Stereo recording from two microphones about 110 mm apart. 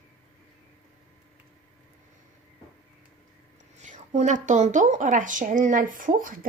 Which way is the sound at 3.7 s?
90° right.